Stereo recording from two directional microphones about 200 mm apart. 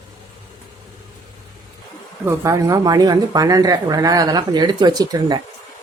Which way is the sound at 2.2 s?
15° right (ahead or behind).